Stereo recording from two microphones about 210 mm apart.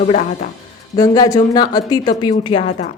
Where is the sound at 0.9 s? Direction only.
20° left (ahead or behind).